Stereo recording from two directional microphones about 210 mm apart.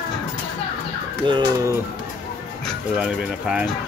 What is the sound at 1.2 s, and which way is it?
Speech, 20° right (ahead or behind).